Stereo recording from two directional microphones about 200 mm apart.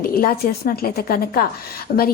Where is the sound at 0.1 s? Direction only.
50° left (ahead or behind).